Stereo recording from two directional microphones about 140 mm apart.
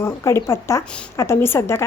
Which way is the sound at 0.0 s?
20° left (ahead or behind).